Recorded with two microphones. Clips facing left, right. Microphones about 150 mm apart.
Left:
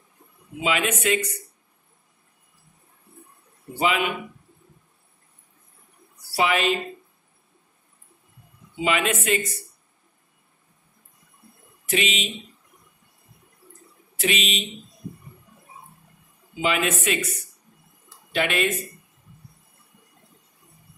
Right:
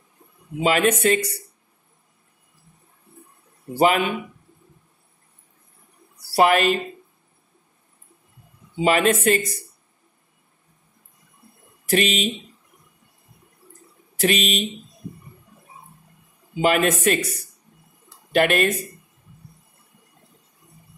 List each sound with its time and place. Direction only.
0.6 s speech: 40° right (ahead or behind)
3.7 s speech: 40° right (ahead or behind)
6.2 s a woman's voice: 45° right (ahead or behind)
8.7 s speech: 40° right (ahead or behind)
11.9 s speech: 45° right (ahead or behind)
14.1 s speech: 45° right (ahead or behind)
16.6 s speech: 45° right (ahead or behind)
18.3 s speech: 50° right (ahead or behind)